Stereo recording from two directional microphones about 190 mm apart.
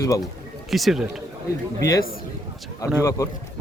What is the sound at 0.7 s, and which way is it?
Speech, centre (ahead or behind).